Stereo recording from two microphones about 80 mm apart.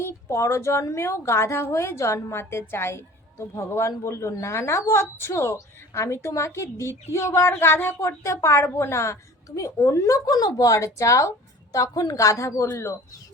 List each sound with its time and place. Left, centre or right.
0.0 s a woman's voice: left